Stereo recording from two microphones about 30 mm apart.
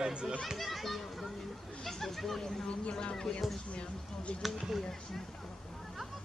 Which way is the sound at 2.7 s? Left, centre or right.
Left.